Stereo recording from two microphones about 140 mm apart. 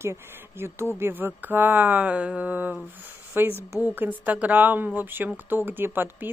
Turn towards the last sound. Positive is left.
turn(degrees=-15)  # may be behind; listen again after turning